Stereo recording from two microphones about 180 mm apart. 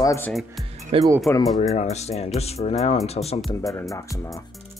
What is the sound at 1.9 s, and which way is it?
Speech, 35° left (ahead or behind).